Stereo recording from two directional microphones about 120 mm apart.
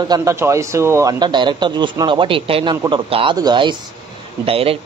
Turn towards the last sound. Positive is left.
turn(degrees=-50)  # may be behind; listen again after turning